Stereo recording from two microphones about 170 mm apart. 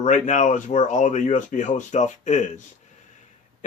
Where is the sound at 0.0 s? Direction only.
45° left (ahead or behind).